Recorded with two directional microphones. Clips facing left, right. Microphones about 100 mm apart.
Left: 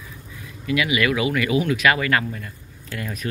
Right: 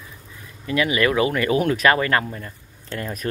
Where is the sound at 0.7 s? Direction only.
35° right (ahead or behind).